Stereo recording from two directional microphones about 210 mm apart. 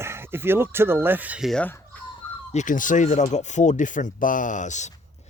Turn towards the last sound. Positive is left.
turn(degrees=35)  # may be behind; listen again after turning